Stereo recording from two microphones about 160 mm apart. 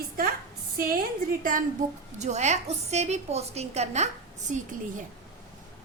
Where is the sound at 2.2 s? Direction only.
45° right (ahead or behind).